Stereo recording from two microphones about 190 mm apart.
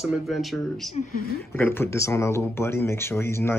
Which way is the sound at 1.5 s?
10° left (ahead or behind).